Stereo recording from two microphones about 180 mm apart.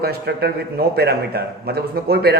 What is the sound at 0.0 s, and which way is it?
A man's voice, 65° right (ahead or behind).